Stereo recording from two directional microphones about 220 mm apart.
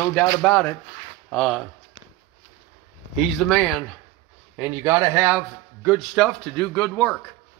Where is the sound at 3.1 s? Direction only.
Centre (ahead or behind).